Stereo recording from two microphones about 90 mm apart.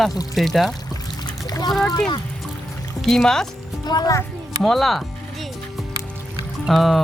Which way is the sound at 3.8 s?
50° left (ahead or behind).